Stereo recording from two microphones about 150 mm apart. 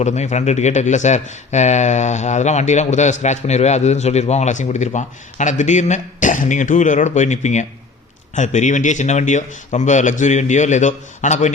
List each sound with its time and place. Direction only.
0.0 s speech: 50° left (ahead or behind)